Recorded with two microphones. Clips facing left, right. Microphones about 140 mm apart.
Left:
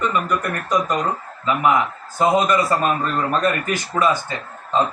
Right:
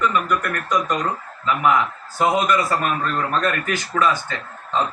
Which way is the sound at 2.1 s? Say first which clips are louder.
Left 2 dB; 25° left (ahead or behind).